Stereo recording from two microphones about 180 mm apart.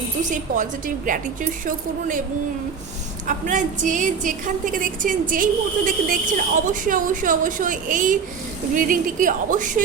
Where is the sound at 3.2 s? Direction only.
45° right (ahead or behind).